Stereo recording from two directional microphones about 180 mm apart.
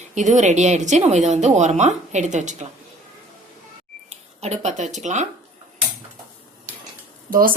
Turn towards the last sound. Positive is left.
turn(degrees=-50)  # may be behind; listen again after turning